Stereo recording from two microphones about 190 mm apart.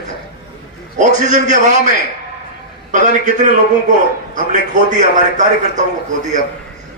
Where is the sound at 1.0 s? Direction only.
40° right (ahead or behind).